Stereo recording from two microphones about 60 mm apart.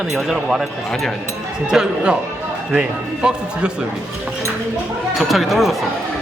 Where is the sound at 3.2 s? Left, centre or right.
Centre.